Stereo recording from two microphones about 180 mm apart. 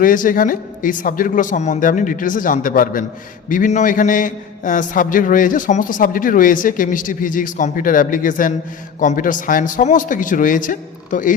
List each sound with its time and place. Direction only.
0.0 s a man's voice: 50° left (ahead or behind)